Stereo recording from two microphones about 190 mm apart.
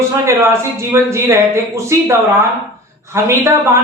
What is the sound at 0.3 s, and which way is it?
A woman's voice, 15° right (ahead or behind).